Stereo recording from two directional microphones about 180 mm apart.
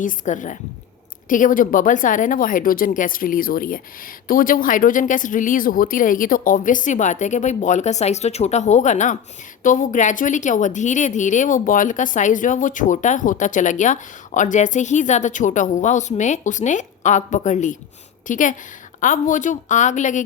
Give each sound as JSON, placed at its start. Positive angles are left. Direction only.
{"t": 0.0, "sound": "speech", "side_deg": 45}